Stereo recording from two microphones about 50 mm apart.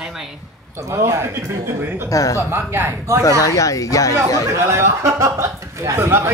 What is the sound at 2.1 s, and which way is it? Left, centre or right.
Speech, left.